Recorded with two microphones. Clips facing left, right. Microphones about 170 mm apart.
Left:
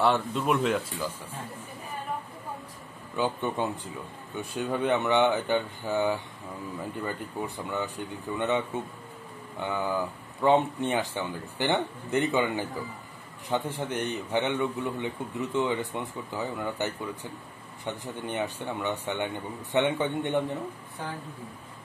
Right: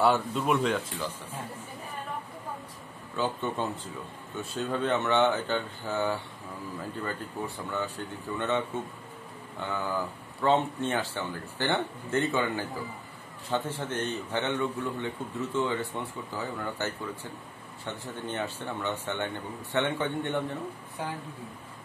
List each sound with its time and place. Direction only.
0.0 s speech: centre (ahead or behind)
3.2 s speech: 15° left (ahead or behind)